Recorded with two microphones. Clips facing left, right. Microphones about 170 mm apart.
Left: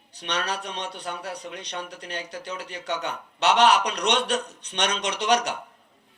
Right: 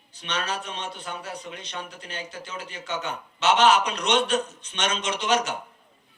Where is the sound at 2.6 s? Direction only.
65° left (ahead or behind).